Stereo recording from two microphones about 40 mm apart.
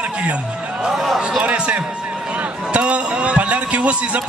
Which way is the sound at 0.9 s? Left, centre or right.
Centre.